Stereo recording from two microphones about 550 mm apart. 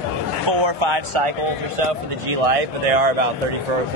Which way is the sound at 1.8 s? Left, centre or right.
Right.